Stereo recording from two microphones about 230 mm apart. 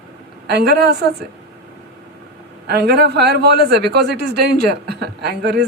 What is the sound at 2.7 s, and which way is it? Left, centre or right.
A woman's voice, right.